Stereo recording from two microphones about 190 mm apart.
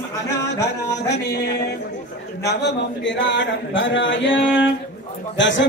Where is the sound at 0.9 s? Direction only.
60° left (ahead or behind).